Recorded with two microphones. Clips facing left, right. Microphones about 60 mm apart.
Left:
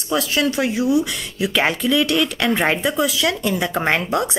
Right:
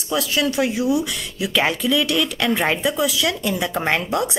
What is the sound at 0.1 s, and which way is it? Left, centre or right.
Speech, centre.